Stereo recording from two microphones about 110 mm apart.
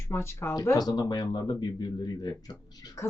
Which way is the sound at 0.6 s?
35° left (ahead or behind).